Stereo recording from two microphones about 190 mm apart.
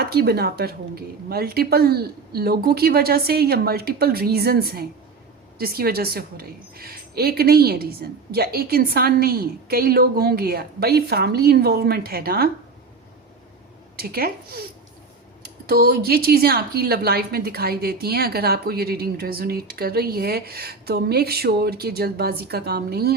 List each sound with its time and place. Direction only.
0.0 s a woman's voice: 55° right (ahead or behind)
13.9 s speech: 55° right (ahead or behind)
15.6 s a woman's voice: 55° right (ahead or behind)